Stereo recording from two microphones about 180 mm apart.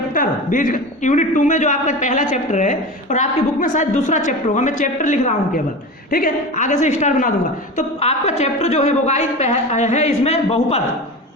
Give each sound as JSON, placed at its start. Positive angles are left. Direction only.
{"t": 0.1, "sound": "a man's voice", "side_deg": 50}